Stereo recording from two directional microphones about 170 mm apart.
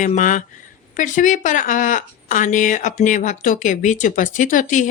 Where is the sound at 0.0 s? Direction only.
50° left (ahead or behind).